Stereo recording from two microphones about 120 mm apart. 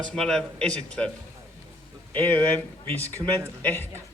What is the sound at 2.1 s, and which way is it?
Speech, 15° left (ahead or behind).